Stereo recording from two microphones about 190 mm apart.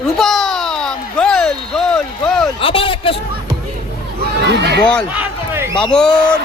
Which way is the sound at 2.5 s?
30° left (ahead or behind).